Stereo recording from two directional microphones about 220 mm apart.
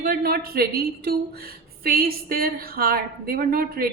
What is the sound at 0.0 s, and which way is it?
A woman's voice, 45° right (ahead or behind).